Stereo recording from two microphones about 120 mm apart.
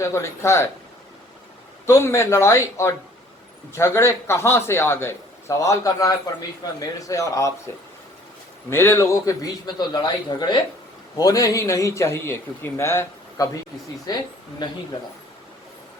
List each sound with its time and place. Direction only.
0.0 s a man's voice: 25° left (ahead or behind)
1.9 s a man's voice: 25° left (ahead or behind)
8.7 s a man's voice: 20° left (ahead or behind)